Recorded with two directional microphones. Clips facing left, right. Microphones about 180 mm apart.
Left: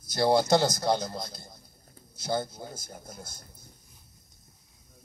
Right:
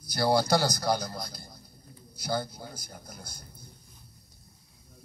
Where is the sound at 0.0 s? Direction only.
25° left (ahead or behind).